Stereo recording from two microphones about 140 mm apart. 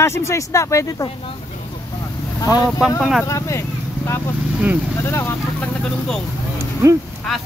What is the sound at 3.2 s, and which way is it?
Speech, 20° left (ahead or behind).